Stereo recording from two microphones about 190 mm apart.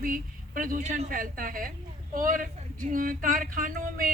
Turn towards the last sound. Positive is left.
turn(degrees=-45)  # may be behind; listen again after turning